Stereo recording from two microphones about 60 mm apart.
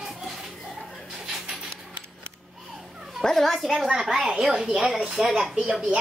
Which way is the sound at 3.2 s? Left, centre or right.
Centre.